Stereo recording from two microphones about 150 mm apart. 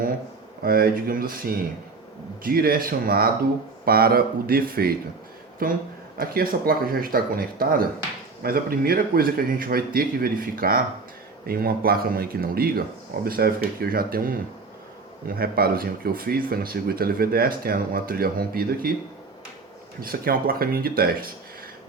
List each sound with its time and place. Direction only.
0.6 s speech: 80° right
5.6 s speech: 70° right (ahead or behind)
8.4 s speech: 85° right
11.4 s speech: 85° right
20.0 s speech: 75° right (ahead or behind)